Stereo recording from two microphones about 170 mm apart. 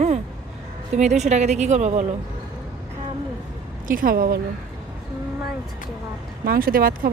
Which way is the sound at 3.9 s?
55° right (ahead or behind).